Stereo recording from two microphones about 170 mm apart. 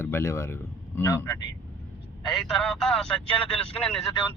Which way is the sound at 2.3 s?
Centre (ahead or behind).